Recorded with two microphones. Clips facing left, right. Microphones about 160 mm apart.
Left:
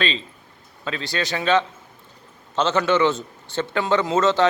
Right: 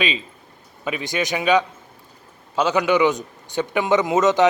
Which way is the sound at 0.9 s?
15° right (ahead or behind).